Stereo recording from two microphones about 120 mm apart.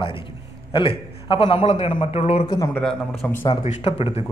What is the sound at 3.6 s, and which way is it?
Speech, 65° left (ahead or behind).